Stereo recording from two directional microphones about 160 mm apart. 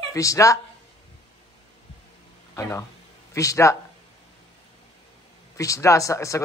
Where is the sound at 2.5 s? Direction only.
15° left (ahead or behind).